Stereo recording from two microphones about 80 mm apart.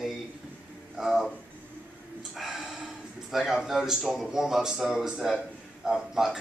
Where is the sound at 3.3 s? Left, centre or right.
Centre.